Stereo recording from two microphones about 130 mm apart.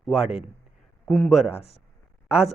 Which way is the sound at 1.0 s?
10° left (ahead or behind).